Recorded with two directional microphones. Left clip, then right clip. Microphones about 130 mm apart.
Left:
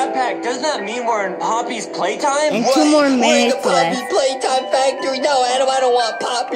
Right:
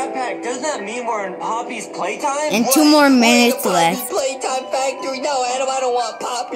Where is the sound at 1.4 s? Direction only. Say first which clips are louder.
Left 4 dB; 35° left (ahead or behind).